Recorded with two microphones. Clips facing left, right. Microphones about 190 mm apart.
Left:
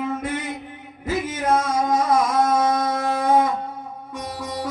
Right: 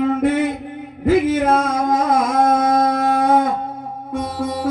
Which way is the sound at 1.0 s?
55° right (ahead or behind).